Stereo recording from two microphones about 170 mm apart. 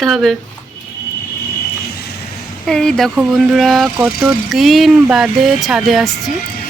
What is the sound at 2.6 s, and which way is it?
Speech, 5° left (ahead or behind).